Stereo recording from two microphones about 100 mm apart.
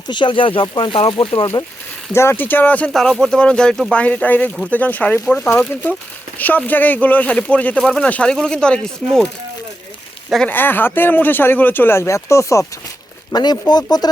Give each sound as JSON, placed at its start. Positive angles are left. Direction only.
{"t": 0.1, "sound": "speech", "side_deg": 50}
{"t": 2.1, "sound": "speech", "side_deg": 25}
{"t": 2.9, "sound": "speech", "side_deg": 5}
{"t": 4.0, "sound": "speech", "side_deg": 15}
{"t": 10.4, "sound": "speech", "side_deg": 20}
{"t": 13.3, "sound": "speech", "side_deg": 45}